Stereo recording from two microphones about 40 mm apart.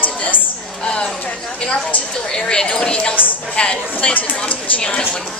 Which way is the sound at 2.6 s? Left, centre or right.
Left.